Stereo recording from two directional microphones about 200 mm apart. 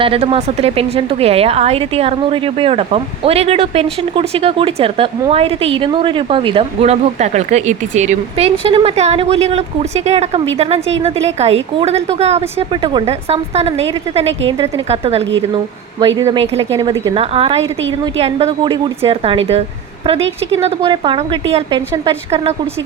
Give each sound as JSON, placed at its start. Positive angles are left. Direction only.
{"t": 0.0, "sound": "a woman's voice", "side_deg": -30}
{"t": 17.2, "sound": "speech", "side_deg": -30}